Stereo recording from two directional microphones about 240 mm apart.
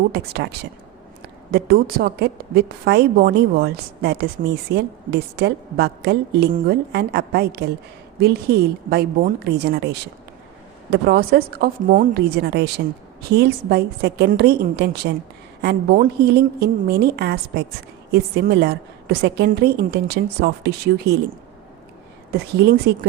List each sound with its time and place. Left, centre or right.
1.5 s a woman's voice: right
22.3 s a woman's voice: right